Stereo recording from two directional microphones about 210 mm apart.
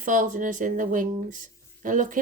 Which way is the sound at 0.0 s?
40° right (ahead or behind).